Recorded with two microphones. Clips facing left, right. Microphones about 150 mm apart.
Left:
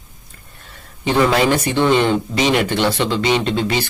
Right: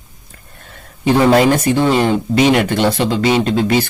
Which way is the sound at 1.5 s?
45° right (ahead or behind).